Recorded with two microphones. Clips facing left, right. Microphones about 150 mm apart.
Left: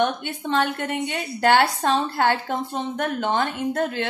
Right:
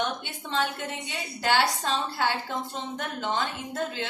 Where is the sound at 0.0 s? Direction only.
55° left (ahead or behind).